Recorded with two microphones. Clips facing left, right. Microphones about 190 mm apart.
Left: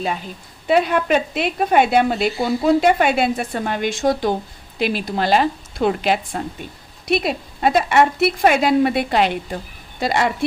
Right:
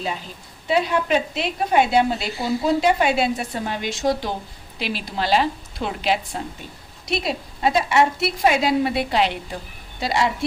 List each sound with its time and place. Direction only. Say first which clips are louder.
0.7 s a woman's voice: left 3 dB; 55° left (ahead or behind)